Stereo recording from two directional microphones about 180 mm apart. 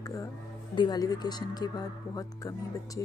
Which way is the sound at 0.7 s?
25° left (ahead or behind).